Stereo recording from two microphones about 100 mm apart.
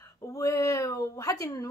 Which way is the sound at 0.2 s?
35° left (ahead or behind).